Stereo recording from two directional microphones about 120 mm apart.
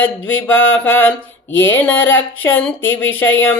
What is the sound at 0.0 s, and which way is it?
Speech, 15° left (ahead or behind).